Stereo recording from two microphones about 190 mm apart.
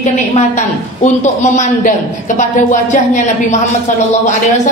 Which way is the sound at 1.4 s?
35° left (ahead or behind).